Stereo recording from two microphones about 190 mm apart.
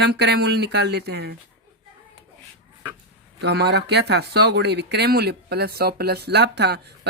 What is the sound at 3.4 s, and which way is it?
Speech, 60° right (ahead or behind).